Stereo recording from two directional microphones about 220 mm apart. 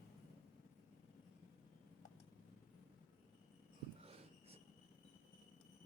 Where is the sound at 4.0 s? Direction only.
25° right (ahead or behind).